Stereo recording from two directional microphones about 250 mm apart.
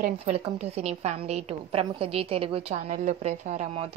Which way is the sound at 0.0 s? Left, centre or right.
Right.